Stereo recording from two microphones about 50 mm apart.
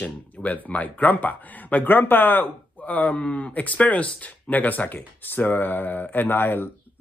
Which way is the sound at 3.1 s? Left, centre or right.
Left.